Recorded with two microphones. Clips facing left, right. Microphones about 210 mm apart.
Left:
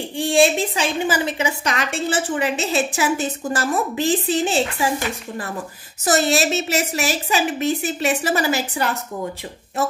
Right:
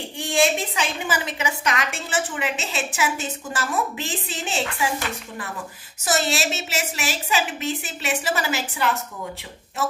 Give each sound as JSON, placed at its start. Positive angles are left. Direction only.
{"t": 0.2, "sound": "a woman's voice", "side_deg": 30}